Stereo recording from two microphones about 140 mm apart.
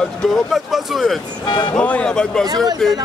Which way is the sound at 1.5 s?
30° left (ahead or behind).